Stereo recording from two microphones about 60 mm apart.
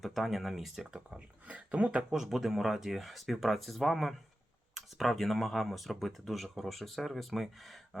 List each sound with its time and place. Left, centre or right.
0.0 s speech: centre
0.9 s speech: centre
2.1 s speech: centre